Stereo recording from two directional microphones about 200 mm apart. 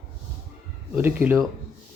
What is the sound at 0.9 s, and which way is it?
Speech, 10° right (ahead or behind).